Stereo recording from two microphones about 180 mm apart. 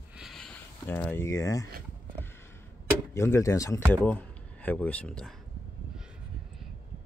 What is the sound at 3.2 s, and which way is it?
Speech, 15° left (ahead or behind).